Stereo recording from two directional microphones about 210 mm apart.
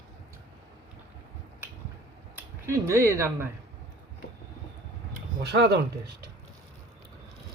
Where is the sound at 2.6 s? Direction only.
15° right (ahead or behind).